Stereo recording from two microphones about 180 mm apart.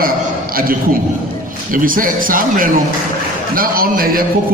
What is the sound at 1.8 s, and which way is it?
A man's voice, 50° right (ahead or behind).